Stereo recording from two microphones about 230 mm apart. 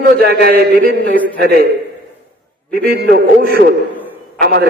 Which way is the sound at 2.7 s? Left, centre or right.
Right.